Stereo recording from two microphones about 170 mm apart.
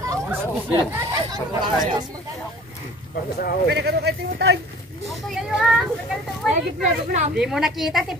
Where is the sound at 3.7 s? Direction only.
75° right (ahead or behind).